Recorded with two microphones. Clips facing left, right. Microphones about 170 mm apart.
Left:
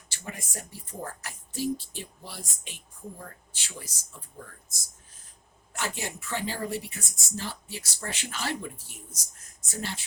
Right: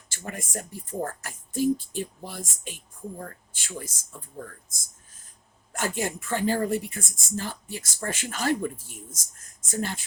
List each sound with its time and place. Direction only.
0.1 s speech: 50° right (ahead or behind)
5.7 s speech: 50° right (ahead or behind)